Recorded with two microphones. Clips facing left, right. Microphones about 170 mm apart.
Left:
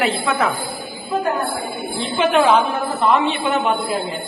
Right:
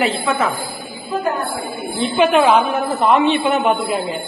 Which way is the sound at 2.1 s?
10° right (ahead or behind).